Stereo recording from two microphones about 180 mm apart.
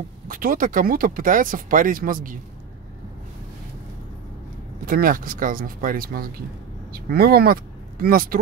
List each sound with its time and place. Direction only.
0.3 s speech: 50° right (ahead or behind)
4.8 s speech: 55° right (ahead or behind)